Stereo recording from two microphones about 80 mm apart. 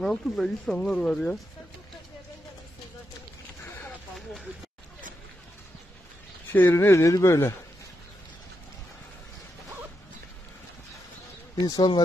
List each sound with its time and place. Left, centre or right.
0.0 s speech: centre
6.5 s speech: left
11.6 s speech: left